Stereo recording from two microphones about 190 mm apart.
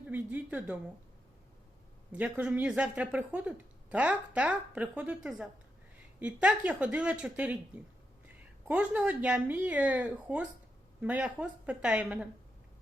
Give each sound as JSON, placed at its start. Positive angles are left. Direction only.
{"t": 0.0, "sound": "a woman's voice", "side_deg": -10}
{"t": 2.1, "sound": "a woman's voice", "side_deg": -5}
{"t": 8.6, "sound": "a woman's voice", "side_deg": -5}